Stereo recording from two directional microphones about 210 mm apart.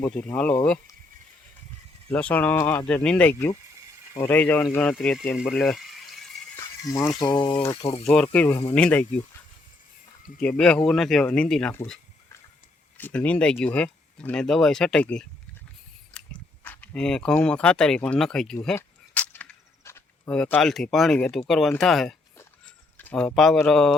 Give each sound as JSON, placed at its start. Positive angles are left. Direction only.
{"t": 0.0, "sound": "speech", "side_deg": 5}
{"t": 2.0, "sound": "speech", "side_deg": 5}
{"t": 6.6, "sound": "speech", "side_deg": 15}
{"t": 10.6, "sound": "speech", "side_deg": 5}
{"t": 16.1, "sound": "biting", "side_deg": 5}
{"t": 16.6, "sound": "speech", "side_deg": 5}